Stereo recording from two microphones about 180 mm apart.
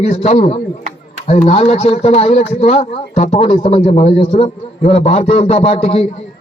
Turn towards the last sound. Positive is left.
turn(degrees=30)  # may be behind; listen again after turning